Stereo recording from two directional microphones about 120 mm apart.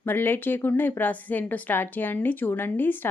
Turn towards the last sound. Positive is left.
turn(degrees=15)  # may be behind; listen again after turning